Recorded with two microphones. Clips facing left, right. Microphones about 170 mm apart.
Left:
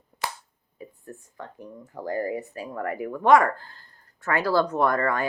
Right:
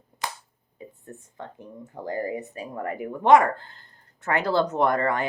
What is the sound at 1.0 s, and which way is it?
Speech, 25° right (ahead or behind).